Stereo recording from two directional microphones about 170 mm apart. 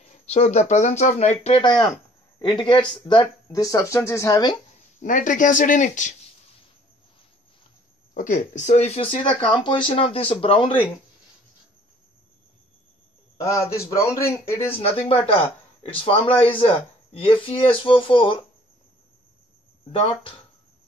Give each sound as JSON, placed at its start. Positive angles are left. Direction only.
{"t": 0.3, "sound": "speech", "side_deg": 40}
{"t": 1.4, "sound": "speech", "side_deg": 30}
{"t": 5.0, "sound": "speech", "side_deg": 50}
{"t": 8.1, "sound": "speech", "side_deg": 50}
{"t": 13.4, "sound": "a man's voice", "side_deg": 20}
{"t": 14.7, "sound": "speech", "side_deg": 35}
{"t": 19.9, "sound": "speech", "side_deg": 30}